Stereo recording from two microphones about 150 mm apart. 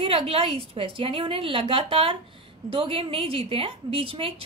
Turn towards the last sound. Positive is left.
turn(degrees=-40)  # may be behind; listen again after turning